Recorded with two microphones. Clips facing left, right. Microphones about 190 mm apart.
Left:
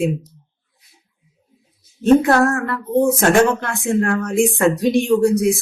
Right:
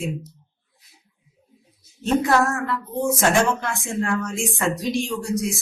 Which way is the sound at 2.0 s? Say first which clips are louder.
Left 7 dB; 60° left (ahead or behind).